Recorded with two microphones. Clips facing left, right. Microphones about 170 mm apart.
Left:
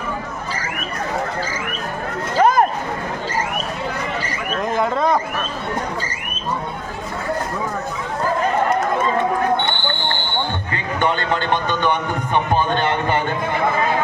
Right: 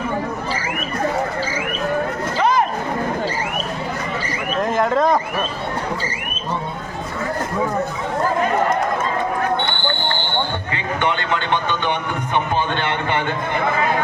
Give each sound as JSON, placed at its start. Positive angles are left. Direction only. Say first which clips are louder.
{"t": 2.4, "sound": "vehicle", "louder": "left 3 dB", "side_deg": 50}
{"t": 4.8, "sound": "speech", "louder": "right 2 dB", "side_deg": 0}
{"t": 11.0, "sound": "speech", "louder": "left 2 dB", "side_deg": 40}